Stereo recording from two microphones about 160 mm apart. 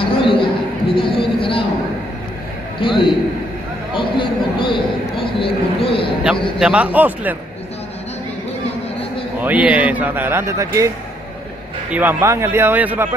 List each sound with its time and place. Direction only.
0.0 s a sound: 35° left (ahead or behind)
0.9 s speech: 35° left (ahead or behind)
2.8 s speech: 30° left (ahead or behind)
3.9 s a sound: 30° left (ahead or behind)
6.2 s a man's voice: 5° right (ahead or behind)
9.4 s a man's voice: 10° right (ahead or behind)
11.9 s a man's voice: 10° right (ahead or behind)